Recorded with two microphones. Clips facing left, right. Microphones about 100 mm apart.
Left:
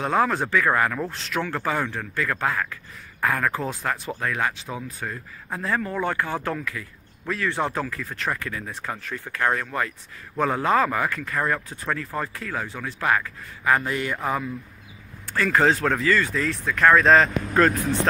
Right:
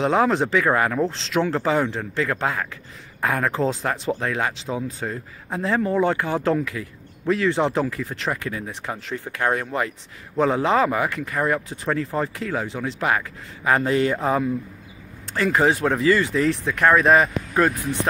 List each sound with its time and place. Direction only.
0.0 s speech: 20° right (ahead or behind)